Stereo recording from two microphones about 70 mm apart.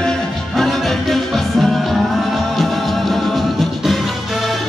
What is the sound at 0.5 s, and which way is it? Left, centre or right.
Music, centre.